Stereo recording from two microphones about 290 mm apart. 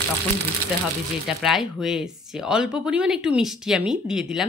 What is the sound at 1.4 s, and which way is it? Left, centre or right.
Speech, centre.